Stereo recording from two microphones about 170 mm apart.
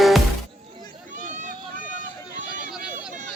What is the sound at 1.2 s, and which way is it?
Run, 50° right (ahead or behind).